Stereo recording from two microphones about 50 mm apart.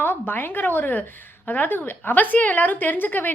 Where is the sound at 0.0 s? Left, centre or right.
Left.